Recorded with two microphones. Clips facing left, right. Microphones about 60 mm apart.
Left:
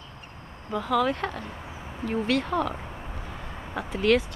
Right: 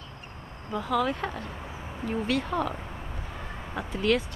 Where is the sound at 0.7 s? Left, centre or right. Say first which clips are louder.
Left 2 dB; centre.